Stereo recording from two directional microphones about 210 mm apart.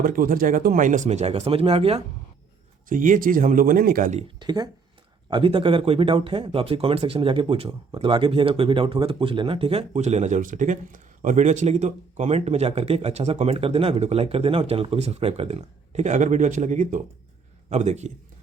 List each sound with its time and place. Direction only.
0.0 s speech: 40° right (ahead or behind)
2.9 s speech: 40° right (ahead or behind)
4.4 s speech: 20° right (ahead or behind)